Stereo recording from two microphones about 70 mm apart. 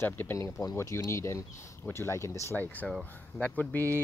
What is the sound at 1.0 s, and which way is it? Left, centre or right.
Speech, left.